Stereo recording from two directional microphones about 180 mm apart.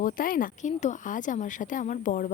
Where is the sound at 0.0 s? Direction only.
50° left (ahead or behind).